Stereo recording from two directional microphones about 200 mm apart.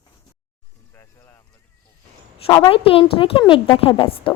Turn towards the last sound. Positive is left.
turn(degrees=25)  # may be behind; listen again after turning